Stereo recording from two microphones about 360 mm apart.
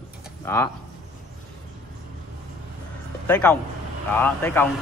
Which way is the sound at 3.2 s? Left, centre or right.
Centre.